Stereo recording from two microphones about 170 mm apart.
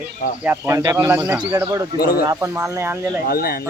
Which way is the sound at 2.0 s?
60° left (ahead or behind).